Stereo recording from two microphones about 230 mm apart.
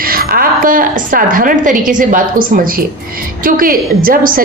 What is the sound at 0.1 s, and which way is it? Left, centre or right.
A woman's voice, right.